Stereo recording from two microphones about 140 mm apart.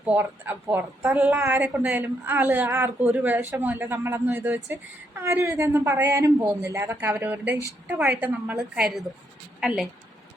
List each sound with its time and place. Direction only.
0.0 s speech: 15° right (ahead or behind)